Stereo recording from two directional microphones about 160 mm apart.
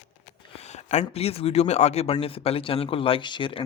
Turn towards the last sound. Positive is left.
turn(degrees=30)  # may be behind; listen again after turning